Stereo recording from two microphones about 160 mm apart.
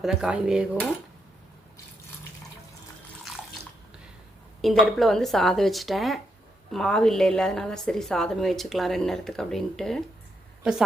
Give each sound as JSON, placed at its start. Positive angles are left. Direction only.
{"t": 0.0, "sound": "a woman's voice", "side_deg": -5}
{"t": 4.6, "sound": "a woman's voice", "side_deg": 0}